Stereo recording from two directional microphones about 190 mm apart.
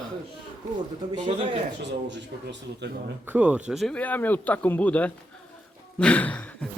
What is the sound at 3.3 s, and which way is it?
Speech, 5° right (ahead or behind).